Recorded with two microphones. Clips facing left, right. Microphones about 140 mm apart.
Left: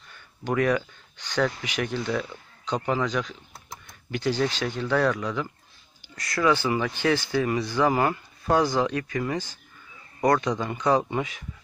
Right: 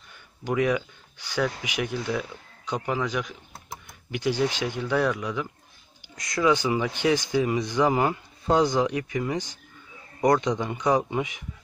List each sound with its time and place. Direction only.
0.4 s speech: 10° right (ahead or behind)